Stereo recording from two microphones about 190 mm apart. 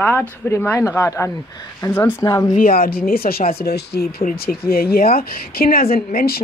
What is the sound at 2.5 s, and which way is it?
Speech, 50° left (ahead or behind).